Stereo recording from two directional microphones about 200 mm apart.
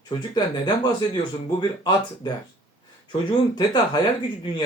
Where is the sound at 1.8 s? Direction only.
20° left (ahead or behind).